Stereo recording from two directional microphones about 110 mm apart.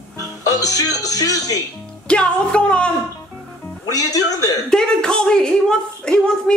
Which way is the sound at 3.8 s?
35° left (ahead or behind).